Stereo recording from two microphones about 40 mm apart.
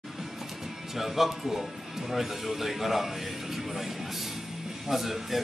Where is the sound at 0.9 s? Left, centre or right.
Centre.